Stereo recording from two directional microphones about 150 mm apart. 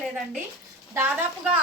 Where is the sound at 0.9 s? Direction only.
15° right (ahead or behind).